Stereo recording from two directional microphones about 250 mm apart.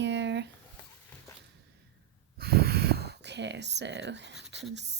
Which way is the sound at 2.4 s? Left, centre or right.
Right.